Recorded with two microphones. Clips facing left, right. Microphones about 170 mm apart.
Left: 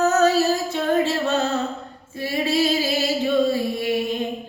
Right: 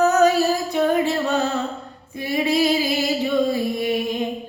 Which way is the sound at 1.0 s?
15° right (ahead or behind).